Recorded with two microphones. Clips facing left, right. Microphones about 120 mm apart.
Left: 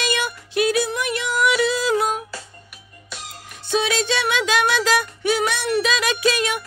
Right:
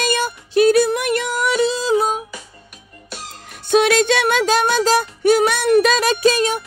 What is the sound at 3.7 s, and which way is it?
Music, 60° right (ahead or behind).